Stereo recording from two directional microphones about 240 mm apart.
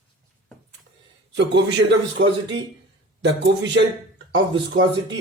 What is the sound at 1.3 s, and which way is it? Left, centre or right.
Speech, right.